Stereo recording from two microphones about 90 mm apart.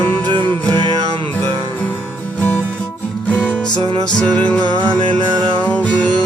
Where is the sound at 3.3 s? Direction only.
15° left (ahead or behind).